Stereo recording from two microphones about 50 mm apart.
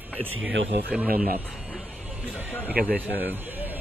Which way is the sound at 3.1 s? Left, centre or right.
Right.